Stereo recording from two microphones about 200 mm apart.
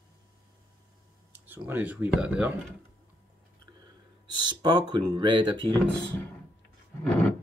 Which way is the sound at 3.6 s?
20° right (ahead or behind).